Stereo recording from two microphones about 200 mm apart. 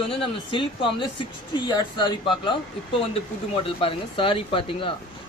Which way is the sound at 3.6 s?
25° left (ahead or behind).